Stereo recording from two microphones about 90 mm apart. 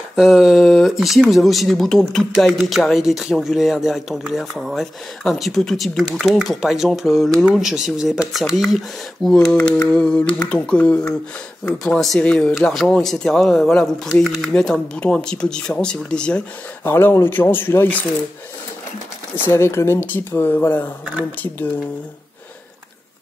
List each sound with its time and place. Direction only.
0.1 s speech: 5° right (ahead or behind); by 16.4 s 10° left (ahead or behind)
16.8 s speech: 25° left (ahead or behind)
19.3 s speech: 25° left (ahead or behind)